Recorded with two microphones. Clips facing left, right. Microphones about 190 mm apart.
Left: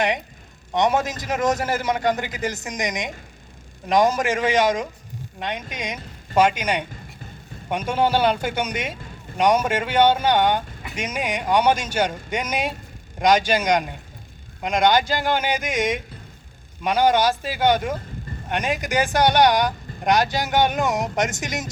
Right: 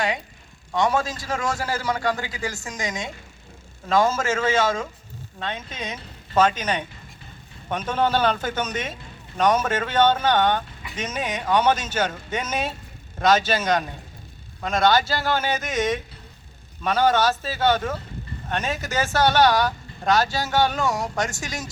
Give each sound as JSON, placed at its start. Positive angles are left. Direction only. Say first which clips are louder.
{"t": 0.7, "sound": "a man's voice", "louder": "left 2 dB", "side_deg": 20}